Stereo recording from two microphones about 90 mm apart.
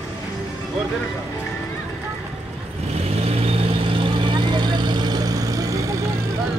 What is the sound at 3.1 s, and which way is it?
Vehicle, 90° right.